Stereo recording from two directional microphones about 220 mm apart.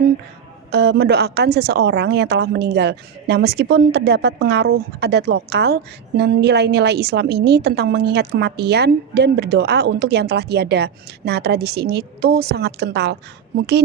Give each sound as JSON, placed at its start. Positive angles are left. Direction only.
{"t": 0.7, "sound": "a woman's voice", "side_deg": -50}